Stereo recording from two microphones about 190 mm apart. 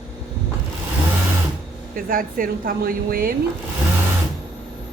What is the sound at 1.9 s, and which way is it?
A woman's voice, 45° right (ahead or behind).